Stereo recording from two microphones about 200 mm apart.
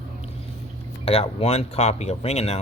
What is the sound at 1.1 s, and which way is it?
Speech, 30° left (ahead or behind).